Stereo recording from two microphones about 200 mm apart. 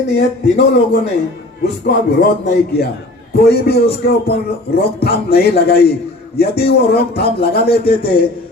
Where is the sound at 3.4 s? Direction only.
50° left (ahead or behind).